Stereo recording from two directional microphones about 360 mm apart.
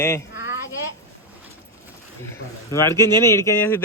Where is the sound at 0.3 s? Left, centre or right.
Left.